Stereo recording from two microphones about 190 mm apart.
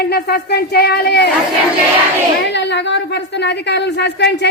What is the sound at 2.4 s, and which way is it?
A woman's voice, 65° left (ahead or behind).